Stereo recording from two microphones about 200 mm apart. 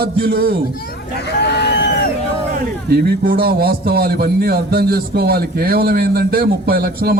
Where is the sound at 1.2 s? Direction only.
55° left (ahead or behind).